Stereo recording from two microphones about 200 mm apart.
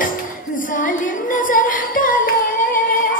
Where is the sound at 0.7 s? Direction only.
40° left (ahead or behind).